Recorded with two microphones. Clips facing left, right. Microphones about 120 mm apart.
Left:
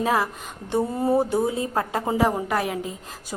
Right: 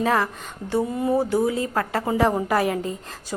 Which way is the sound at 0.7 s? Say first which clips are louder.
Even; 30° left (ahead or behind).